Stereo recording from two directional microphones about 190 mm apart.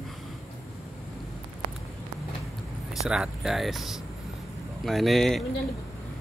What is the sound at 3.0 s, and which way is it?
A man's voice, 5° right (ahead or behind).